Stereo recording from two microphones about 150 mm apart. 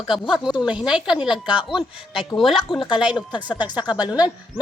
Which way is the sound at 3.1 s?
30° left (ahead or behind).